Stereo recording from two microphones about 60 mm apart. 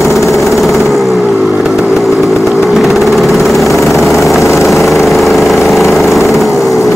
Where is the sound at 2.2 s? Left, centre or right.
Centre.